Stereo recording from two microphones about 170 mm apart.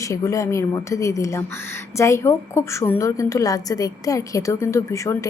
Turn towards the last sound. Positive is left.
turn(degrees=20)  # may be behind; listen again after turning